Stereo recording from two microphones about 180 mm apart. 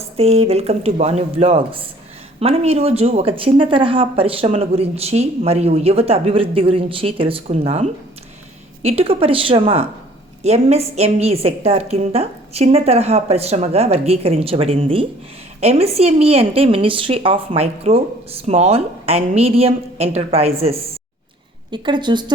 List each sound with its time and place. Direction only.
0.2 s speech: 35° right (ahead or behind)